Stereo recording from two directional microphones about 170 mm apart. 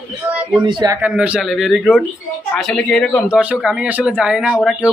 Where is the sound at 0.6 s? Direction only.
25° right (ahead or behind).